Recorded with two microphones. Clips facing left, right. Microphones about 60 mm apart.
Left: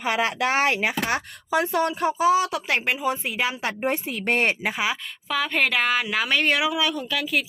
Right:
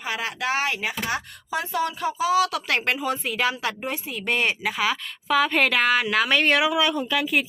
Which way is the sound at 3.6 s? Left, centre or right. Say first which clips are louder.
Left 3 dB; left.